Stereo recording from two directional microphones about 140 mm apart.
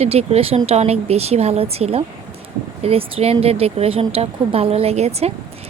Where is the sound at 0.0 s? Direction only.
45° right (ahead or behind).